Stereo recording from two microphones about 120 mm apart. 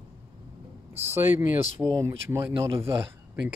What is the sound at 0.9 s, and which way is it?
Speech, 20° right (ahead or behind).